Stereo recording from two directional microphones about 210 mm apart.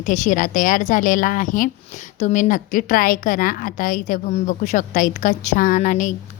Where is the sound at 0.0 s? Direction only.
40° left (ahead or behind).